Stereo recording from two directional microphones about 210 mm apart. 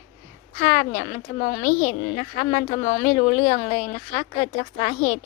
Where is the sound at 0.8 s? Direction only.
45° left (ahead or behind); by 5.2 s 30° left (ahead or behind).